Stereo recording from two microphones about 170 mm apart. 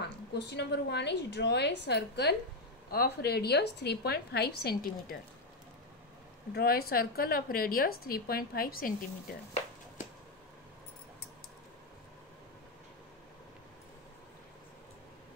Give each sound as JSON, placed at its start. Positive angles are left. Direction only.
{"t": 0.0, "sound": "a woman's voice", "side_deg": 85}
{"t": 2.9, "sound": "a woman's voice", "side_deg": 65}
{"t": 6.5, "sound": "a woman's voice", "side_deg": 65}